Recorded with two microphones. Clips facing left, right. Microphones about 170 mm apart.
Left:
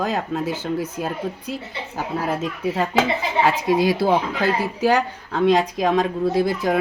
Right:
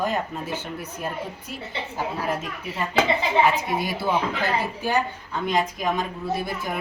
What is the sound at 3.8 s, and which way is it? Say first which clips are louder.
Speech: left 7 dB; 90° left.